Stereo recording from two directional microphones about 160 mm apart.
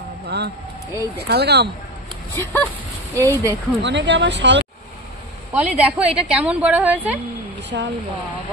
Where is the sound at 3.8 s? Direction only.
90° right.